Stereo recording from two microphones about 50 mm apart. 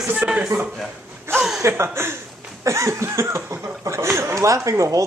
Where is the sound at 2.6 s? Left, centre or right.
Right.